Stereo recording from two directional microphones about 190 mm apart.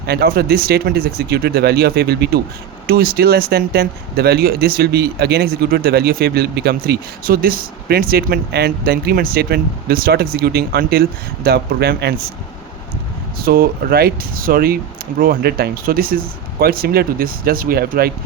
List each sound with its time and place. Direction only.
0.0 s speech: 55° right (ahead or behind)
13.4 s speech: 50° right (ahead or behind)